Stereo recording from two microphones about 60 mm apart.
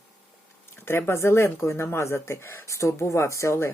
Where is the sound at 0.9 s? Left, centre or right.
Left.